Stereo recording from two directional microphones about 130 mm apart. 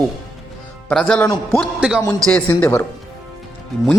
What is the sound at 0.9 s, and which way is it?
Speech, 5° left (ahead or behind).